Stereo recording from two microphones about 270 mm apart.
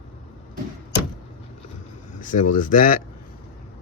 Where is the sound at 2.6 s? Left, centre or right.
Left.